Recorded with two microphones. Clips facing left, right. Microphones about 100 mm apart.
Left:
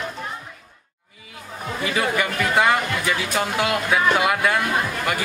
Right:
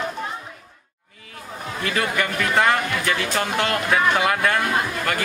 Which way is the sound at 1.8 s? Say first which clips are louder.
Left 1 dB; 10° left (ahead or behind).